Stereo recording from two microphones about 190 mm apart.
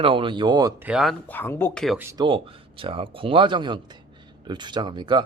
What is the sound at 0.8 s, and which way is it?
Speech, 5° right (ahead or behind).